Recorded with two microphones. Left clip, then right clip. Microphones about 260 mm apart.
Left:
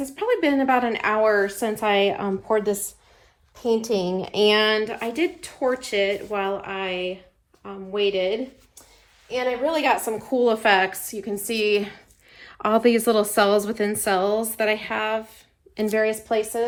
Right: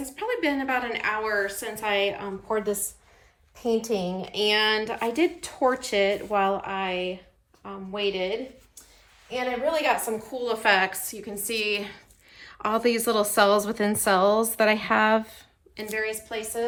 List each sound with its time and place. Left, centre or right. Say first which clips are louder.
0.0 s a woman's voice: left 5 dB; centre
3.7 s a child's voice: left 4 dB; left
4.2 s a woman's voice: left 5 dB; centre
9.6 s a woman's voice: left 2 dB; left
10.3 s a woman's voice: left 5 dB; centre
15.7 s a woman's voice: left 7 dB; centre